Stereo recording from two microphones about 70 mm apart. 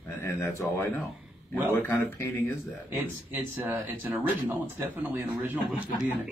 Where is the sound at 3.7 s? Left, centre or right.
Right.